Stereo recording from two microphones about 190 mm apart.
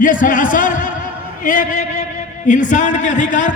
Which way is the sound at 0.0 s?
45° left (ahead or behind).